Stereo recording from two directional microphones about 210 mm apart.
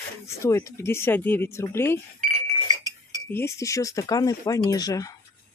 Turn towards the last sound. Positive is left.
turn(degrees=15)  # may be behind; listen again after turning